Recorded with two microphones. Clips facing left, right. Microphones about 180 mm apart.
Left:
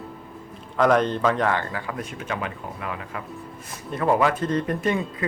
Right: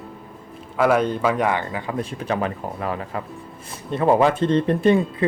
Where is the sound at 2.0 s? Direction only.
35° right (ahead or behind).